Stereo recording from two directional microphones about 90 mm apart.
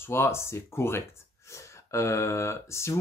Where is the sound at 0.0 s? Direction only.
30° left (ahead or behind).